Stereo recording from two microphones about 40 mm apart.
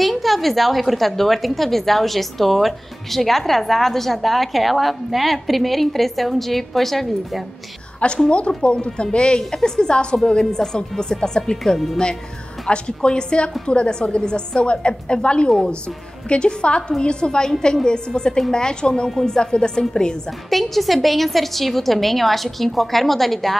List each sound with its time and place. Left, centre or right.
0.0 s a woman's voice: centre
8.3 s a woman's voice: left
12.6 s a woman's voice: left
20.4 s a woman's voice: centre